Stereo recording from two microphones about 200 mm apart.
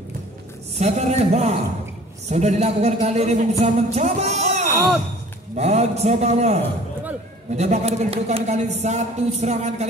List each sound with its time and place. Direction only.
0.7 s speech: 35° right (ahead or behind)